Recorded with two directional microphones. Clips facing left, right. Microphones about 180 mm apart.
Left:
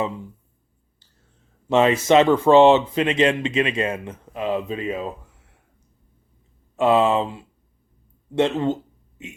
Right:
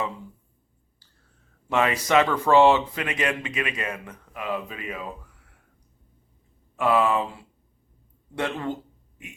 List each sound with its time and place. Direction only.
1.7 s speech: 25° left (ahead or behind)
6.7 s speech: 25° left (ahead or behind)